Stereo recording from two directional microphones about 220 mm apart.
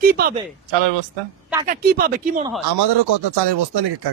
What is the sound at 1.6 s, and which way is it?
Speech, 45° right (ahead or behind).